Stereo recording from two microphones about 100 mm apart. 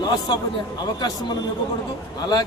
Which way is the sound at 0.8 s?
45° left (ahead or behind).